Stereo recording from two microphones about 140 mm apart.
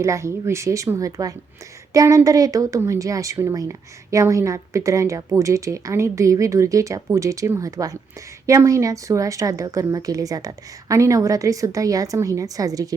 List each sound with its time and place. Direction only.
0.0 s speech: 20° right (ahead or behind)